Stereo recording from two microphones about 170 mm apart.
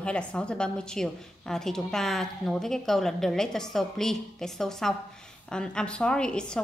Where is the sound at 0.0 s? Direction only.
5° left (ahead or behind).